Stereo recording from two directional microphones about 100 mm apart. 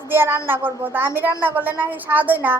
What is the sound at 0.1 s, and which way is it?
Speech, 25° right (ahead or behind).